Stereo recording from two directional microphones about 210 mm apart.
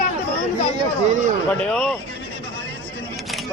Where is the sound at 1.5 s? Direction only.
5° left (ahead or behind).